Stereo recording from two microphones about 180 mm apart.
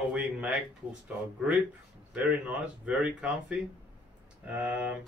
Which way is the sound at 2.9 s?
5° right (ahead or behind).